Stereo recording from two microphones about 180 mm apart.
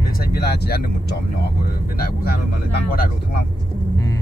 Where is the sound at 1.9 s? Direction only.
55° left (ahead or behind).